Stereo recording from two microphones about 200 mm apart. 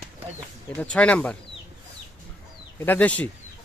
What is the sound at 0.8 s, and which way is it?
Speech, 5° left (ahead or behind).